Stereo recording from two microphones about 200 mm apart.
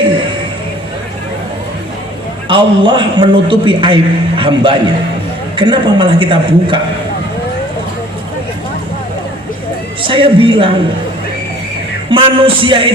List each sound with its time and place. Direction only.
2.5 s a man's voice: 25° right (ahead or behind)
10.1 s a man's voice: 25° right (ahead or behind)
12.1 s a man's voice: 25° right (ahead or behind)